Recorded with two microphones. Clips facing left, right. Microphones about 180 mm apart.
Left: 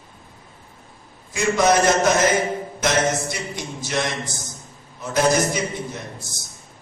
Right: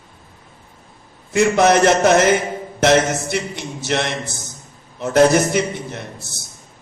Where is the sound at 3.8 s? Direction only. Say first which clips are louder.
Right 4 dB; 65° right (ahead or behind).